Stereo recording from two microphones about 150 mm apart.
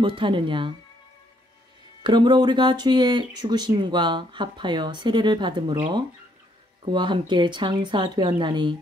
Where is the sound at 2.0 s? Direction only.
30° right (ahead or behind).